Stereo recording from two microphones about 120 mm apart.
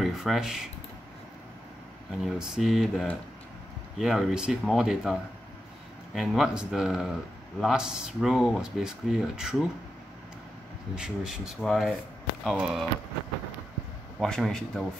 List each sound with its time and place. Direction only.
0.0 s speech: centre (ahead or behind)
2.2 s speech: 5° right (ahead or behind)
11.0 s speech: 5° right (ahead or behind)
14.2 s speech: 5° left (ahead or behind)